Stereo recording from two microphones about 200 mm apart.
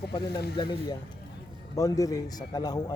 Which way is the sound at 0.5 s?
25° left (ahead or behind).